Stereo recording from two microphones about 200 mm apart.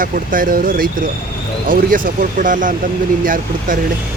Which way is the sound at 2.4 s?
40° right (ahead or behind).